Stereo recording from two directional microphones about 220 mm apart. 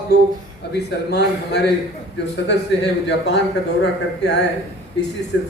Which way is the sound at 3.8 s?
50° left (ahead or behind).